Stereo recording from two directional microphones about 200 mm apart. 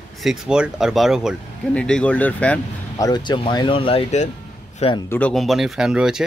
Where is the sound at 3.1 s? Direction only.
20° left (ahead or behind).